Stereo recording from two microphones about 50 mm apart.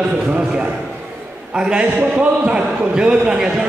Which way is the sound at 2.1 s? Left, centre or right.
Right.